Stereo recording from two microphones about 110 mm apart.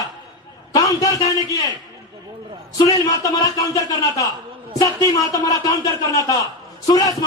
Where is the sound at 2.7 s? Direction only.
30° left (ahead or behind).